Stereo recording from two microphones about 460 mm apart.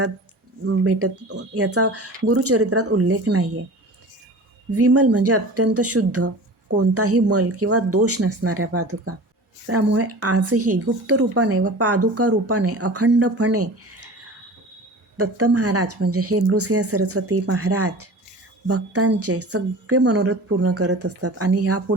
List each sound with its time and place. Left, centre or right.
0.6 s speech: right
4.7 s speech: right
15.2 s speech: right